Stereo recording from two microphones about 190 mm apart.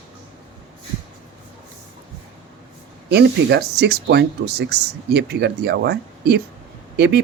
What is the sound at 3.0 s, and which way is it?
Speech, 60° right (ahead or behind).